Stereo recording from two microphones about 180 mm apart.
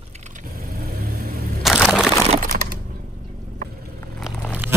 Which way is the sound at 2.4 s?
55° right (ahead or behind).